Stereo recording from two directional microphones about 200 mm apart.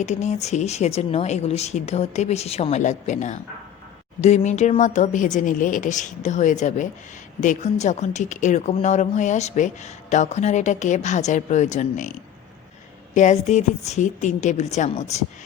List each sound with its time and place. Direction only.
0.0 s speech: 35° left (ahead or behind)
13.1 s speech: 35° left (ahead or behind)